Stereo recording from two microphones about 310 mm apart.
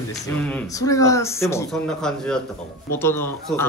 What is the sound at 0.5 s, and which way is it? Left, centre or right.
Speech, centre.